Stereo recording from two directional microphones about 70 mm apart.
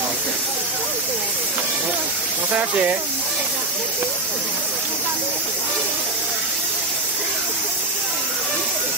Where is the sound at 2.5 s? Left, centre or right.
Right.